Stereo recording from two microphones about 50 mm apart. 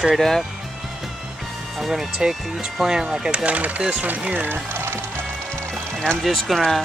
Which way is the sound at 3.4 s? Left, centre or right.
Right.